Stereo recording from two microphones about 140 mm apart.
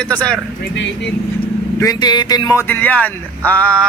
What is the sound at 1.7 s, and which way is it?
Speech, 30° left (ahead or behind).